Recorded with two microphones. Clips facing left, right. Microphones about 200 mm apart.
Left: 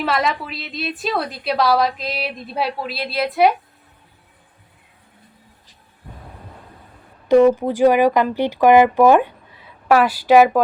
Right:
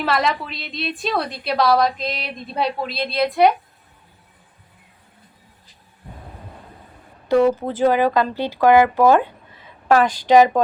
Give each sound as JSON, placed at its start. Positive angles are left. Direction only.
{"t": 0.0, "sound": "a woman's voice", "side_deg": 0}
{"t": 7.3, "sound": "speech", "side_deg": 15}